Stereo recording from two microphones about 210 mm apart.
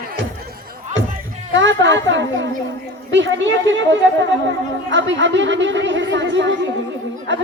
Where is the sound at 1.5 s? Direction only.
60° right (ahead or behind).